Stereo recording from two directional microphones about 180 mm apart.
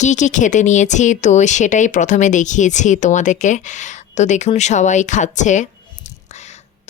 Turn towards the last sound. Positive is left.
turn(degrees=40)  # may be behind; listen again after turning